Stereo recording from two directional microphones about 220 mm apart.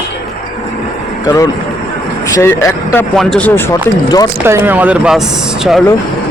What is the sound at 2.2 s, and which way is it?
Speech, 15° left (ahead or behind).